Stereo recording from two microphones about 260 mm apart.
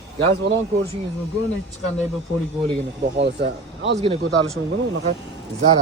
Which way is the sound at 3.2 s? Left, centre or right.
Right.